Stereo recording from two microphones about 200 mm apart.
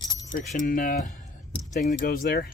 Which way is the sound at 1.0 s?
40° left (ahead or behind).